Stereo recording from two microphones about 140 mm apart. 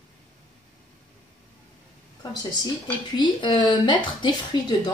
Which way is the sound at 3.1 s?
35° left (ahead or behind).